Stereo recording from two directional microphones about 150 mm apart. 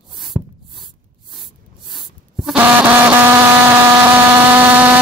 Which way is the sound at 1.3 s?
Centre (ahead or behind).